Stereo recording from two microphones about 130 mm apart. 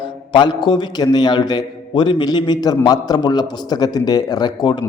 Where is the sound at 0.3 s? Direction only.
35° left (ahead or behind).